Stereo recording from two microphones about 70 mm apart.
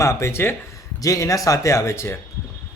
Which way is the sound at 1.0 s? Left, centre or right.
Left.